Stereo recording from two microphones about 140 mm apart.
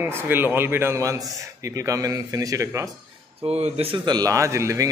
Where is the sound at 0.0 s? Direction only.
15° right (ahead or behind).